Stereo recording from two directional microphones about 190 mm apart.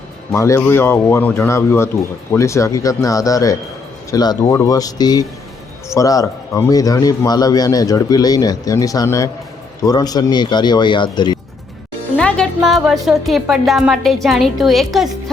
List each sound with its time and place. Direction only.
0.3 s a man's voice: 15° left (ahead or behind)
12.1 s a woman's voice: 5° left (ahead or behind)